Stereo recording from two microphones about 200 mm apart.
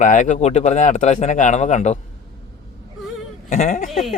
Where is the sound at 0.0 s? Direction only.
40° left (ahead or behind).